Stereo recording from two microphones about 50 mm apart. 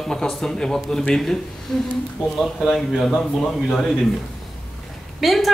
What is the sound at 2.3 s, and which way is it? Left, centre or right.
A man's voice, centre.